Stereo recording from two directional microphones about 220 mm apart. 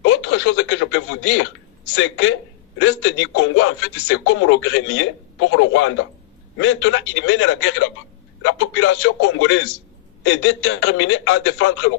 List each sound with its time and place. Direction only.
0.0 s a man's voice: 60° left (ahead or behind)